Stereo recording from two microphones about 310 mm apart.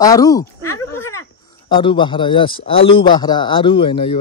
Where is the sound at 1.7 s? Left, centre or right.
Centre.